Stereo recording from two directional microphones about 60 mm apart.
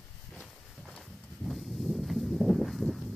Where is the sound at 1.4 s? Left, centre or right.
Centre.